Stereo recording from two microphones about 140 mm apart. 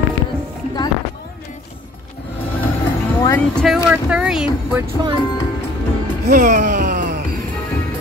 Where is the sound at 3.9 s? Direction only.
5° right (ahead or behind).